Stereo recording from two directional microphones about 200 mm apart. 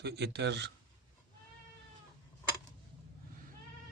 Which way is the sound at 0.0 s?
55° right (ahead or behind).